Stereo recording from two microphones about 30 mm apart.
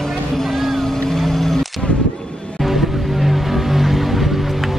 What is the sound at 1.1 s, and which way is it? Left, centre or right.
Music, centre.